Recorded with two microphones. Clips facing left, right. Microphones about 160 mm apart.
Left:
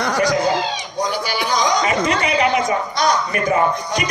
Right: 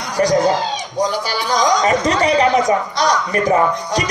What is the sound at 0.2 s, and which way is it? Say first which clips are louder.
A man's voice: right 6 dB; 40° right (ahead or behind).